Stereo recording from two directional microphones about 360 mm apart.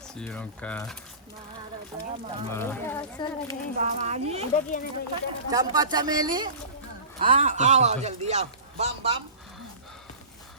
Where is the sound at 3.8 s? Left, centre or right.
Centre.